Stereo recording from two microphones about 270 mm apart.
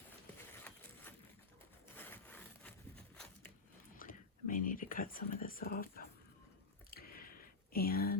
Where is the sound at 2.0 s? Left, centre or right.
Centre.